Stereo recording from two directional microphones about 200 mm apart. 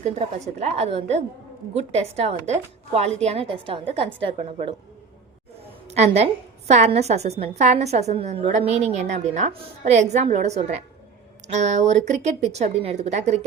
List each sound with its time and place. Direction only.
0.0 s a woman's voice: 35° right (ahead or behind)
5.9 s a woman's voice: 30° right (ahead or behind)